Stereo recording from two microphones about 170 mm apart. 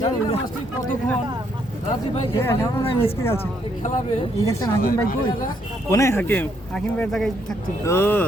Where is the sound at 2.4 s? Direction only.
15° left (ahead or behind).